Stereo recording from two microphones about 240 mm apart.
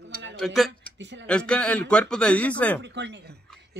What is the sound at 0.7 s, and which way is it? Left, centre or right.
Speech, right.